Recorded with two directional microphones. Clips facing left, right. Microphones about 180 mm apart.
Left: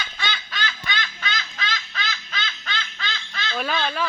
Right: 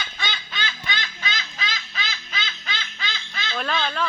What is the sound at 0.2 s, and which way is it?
Quack, 20° right (ahead or behind).